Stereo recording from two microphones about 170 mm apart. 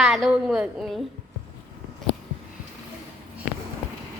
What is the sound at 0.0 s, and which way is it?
A woman's voice, centre (ahead or behind).